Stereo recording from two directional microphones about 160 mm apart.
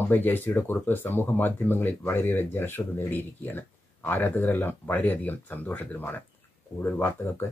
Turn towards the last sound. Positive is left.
turn(degrees=15)  # may be behind; listen again after turning